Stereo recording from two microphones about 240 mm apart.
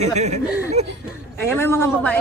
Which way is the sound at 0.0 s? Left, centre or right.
Right.